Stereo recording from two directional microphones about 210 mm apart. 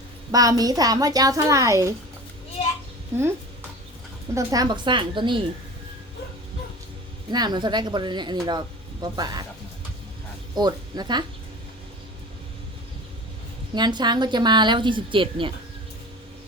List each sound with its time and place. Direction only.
0.3 s a woman's voice: 15° right (ahead or behind)
4.4 s speech: 20° right (ahead or behind)
7.3 s speech: 20° right (ahead or behind)
10.5 s a woman's voice: 20° right (ahead or behind)
13.7 s speech: 20° right (ahead or behind)